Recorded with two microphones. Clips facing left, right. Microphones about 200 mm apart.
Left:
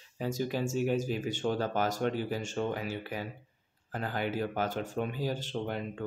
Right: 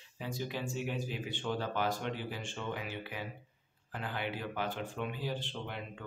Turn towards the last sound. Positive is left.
turn(degrees=40)  # may be behind; listen again after turning